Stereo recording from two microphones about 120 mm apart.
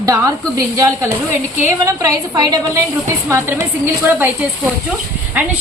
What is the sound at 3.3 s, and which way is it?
A woman's voice, 20° right (ahead or behind).